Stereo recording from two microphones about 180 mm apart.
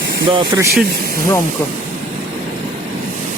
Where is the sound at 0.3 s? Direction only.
15° right (ahead or behind).